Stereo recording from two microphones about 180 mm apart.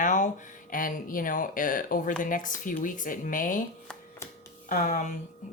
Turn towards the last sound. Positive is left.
turn(degrees=45)  # may be behind; listen again after turning